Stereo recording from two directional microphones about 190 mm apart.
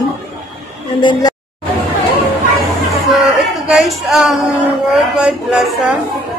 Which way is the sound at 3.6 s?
Centre (ahead or behind).